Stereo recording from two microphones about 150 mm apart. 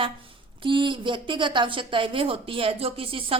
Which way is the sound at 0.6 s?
35° right (ahead or behind).